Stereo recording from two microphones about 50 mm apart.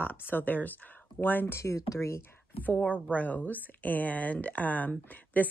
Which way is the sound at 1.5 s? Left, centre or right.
Left.